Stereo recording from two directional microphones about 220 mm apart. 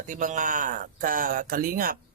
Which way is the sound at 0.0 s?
35° right (ahead or behind).